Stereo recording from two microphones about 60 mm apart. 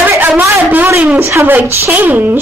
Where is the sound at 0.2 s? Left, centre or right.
Right.